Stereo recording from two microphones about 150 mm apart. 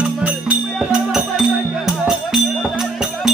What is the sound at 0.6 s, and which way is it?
Music, 5° left (ahead or behind).